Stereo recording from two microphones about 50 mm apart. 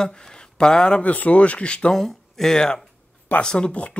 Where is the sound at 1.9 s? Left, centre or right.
Centre.